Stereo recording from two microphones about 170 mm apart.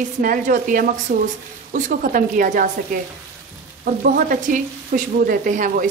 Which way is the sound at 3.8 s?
55° right (ahead or behind).